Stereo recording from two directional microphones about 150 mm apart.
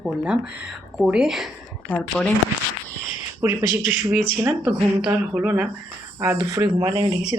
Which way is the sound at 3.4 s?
15° right (ahead or behind).